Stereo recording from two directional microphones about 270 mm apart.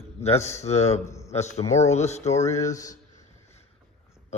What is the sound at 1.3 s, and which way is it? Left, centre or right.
Speech, left.